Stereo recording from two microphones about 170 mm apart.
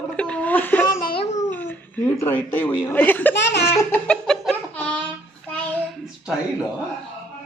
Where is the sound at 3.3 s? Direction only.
90° left.